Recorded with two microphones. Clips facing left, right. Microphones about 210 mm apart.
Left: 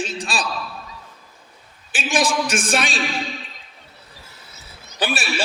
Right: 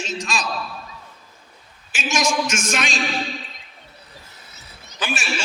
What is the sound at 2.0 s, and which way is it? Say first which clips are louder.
A man's voice: left 1 dB; 35° left (ahead or behind).